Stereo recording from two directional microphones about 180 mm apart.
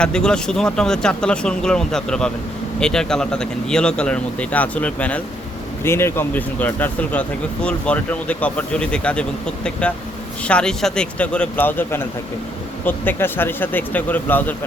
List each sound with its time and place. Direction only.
0.0 s speech: 5° left (ahead or behind)
10.4 s speech: 5° left (ahead or behind)